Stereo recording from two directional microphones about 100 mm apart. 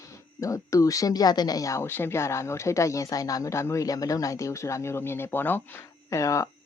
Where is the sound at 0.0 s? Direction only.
30° left (ahead or behind).